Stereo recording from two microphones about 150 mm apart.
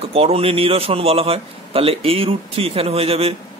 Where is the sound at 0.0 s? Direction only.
40° right (ahead or behind).